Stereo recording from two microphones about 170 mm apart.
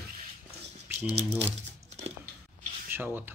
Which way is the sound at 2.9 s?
10° right (ahead or behind).